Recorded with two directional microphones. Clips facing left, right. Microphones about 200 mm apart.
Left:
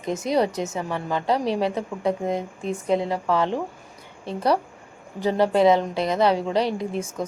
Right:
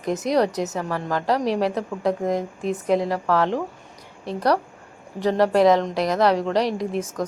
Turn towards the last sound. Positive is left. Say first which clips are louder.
# right 2 dB
turn(degrees=0)  # may be behind; listen again after turning